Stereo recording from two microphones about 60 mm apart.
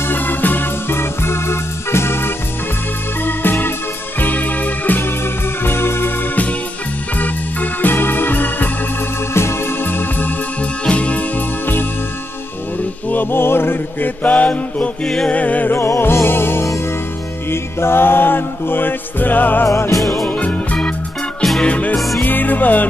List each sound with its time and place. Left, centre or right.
0.1 s organ: left
3.3 s music: left
7.2 s organ: left
9.3 s music: left
13.1 s chant: left
15.2 s music: left
15.7 s music: left
20.0 s music: centre
20.2 s music: left
21.4 s music: centre
21.6 s music: left
21.9 s music: centre
22.2 s music: left